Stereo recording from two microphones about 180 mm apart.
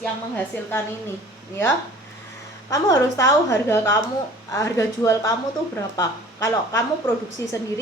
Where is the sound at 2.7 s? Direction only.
20° left (ahead or behind).